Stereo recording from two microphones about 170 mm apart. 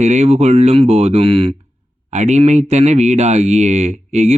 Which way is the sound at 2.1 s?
45° right (ahead or behind).